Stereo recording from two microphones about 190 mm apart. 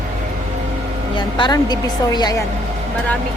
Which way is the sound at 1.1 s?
25° left (ahead or behind).